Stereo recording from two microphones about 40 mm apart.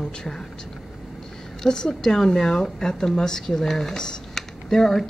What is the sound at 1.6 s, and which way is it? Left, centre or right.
A woman's voice, centre.